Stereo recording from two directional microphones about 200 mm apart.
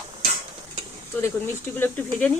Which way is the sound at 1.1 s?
10° left (ahead or behind).